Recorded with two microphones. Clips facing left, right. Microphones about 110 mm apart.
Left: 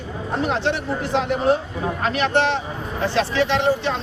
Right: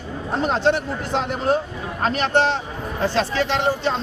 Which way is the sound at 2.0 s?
35° right (ahead or behind).